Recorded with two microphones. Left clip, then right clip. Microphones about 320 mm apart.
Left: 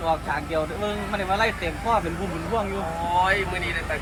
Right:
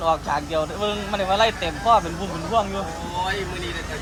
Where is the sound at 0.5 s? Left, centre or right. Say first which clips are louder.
Right 2 dB; centre.